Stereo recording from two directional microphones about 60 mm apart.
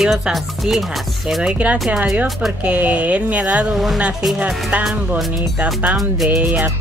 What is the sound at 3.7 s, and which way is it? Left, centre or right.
Speech, centre.